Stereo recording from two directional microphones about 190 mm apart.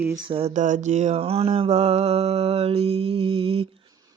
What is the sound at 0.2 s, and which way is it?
Mantra, 30° right (ahead or behind).